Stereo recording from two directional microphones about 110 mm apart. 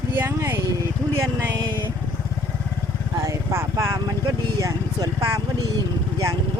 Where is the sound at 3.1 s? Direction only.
30° right (ahead or behind).